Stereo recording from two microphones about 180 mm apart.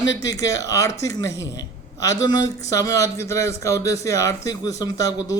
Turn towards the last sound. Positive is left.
turn(degrees=20)  # may be behind; listen again after turning